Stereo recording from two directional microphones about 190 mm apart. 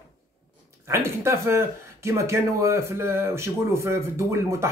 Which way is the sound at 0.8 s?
15° right (ahead or behind).